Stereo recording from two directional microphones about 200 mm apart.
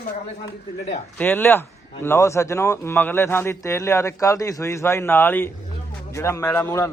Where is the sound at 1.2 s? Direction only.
10° left (ahead or behind).